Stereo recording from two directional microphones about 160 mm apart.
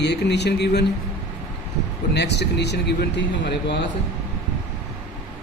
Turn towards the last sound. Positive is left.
turn(degrees=90)